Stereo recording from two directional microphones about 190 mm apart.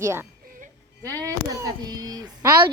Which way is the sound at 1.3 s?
20° right (ahead or behind).